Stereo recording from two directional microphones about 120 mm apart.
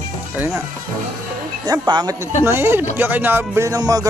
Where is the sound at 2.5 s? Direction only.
20° right (ahead or behind).